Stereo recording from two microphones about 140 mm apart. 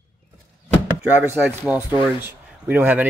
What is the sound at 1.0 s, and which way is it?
Speech, 15° right (ahead or behind).